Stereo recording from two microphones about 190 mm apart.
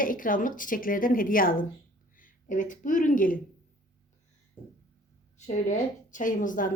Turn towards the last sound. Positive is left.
turn(degrees=45)  # may be behind; listen again after turning